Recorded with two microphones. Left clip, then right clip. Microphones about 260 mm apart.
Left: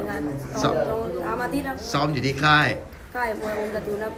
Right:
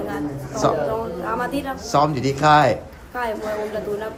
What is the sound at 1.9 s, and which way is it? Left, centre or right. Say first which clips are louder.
Speech: right 6 dB; centre.